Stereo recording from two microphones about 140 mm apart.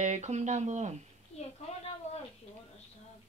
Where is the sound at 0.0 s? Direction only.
55° right (ahead or behind).